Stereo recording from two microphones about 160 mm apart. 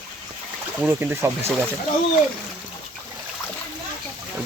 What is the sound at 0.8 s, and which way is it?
Speech, 10° right (ahead or behind).